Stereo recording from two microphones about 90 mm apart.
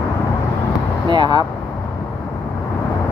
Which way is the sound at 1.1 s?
55° right (ahead or behind).